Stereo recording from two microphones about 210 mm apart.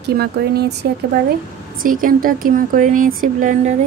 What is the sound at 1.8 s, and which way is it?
Speech, 40° right (ahead or behind).